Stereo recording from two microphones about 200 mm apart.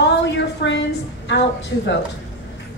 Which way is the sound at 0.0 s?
65° left (ahead or behind).